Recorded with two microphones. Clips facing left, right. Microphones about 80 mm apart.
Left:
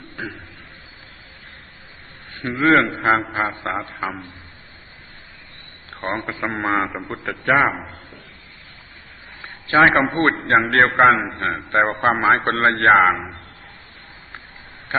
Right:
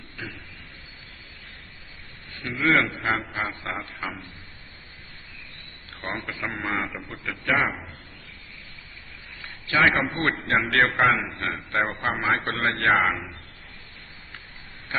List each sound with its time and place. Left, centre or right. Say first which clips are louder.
2.3 s a man's voice: left 7 dB; left
5.9 s a man's voice: left 7 dB; left
9.4 s a man's voice: left 7 dB; left